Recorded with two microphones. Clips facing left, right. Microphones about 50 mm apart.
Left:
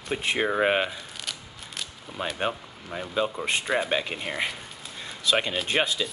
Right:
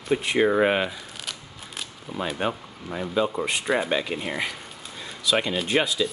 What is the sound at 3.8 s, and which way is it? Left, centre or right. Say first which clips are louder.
Speech: right 2 dB; left.